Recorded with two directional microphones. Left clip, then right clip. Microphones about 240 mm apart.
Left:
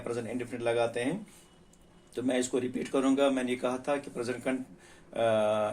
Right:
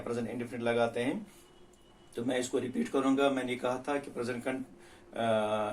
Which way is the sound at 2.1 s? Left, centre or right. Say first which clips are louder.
Left 2 dB; left.